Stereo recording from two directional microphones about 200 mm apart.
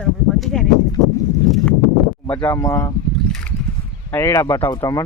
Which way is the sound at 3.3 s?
5° left (ahead or behind).